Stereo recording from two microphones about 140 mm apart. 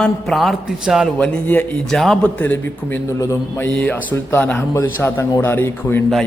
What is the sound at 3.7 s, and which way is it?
A man's voice, 10° left (ahead or behind).